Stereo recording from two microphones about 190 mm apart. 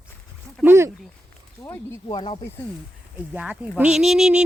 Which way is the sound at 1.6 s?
15° left (ahead or behind).